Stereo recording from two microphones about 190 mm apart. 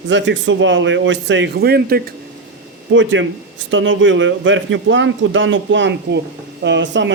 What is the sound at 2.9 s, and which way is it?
A man's voice, 75° right (ahead or behind).